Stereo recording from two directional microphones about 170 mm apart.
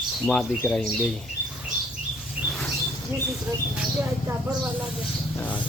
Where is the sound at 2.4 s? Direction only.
Centre (ahead or behind).